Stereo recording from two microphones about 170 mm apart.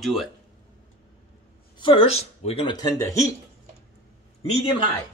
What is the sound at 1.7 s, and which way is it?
Speech, 30° left (ahead or behind).